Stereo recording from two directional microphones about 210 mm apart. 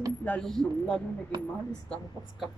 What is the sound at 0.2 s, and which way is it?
Speech, 5° left (ahead or behind).